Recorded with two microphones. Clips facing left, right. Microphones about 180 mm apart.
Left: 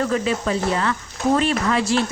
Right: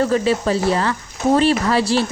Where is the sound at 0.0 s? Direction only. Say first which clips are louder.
Right 4 dB; 35° right (ahead or behind).